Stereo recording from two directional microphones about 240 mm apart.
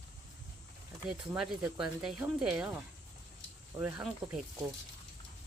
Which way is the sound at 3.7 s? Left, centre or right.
Centre.